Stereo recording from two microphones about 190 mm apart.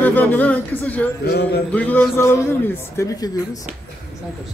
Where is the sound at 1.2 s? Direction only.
60° left (ahead or behind).